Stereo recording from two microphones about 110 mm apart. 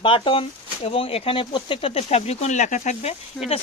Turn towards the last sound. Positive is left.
turn(degrees=15)  # may be behind; listen again after turning